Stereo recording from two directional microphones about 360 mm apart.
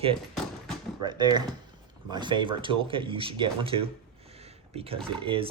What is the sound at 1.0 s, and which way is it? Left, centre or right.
Speech, centre.